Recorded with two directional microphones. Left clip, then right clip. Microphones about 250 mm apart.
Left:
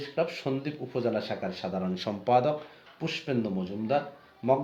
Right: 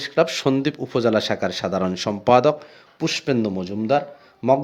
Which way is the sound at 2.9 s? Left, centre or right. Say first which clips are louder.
Right 9 dB; right.